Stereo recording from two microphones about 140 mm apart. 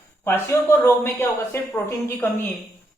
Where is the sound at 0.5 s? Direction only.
20° left (ahead or behind).